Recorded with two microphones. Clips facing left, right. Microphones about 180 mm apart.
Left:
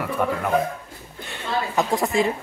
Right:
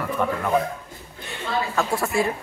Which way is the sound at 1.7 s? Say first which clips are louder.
Left 3 dB; 20° left (ahead or behind).